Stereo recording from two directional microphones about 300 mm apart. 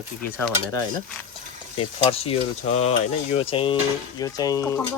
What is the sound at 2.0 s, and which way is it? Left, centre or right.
Speech, centre.